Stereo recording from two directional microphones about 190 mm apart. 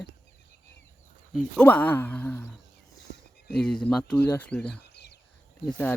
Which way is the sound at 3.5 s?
5° left (ahead or behind).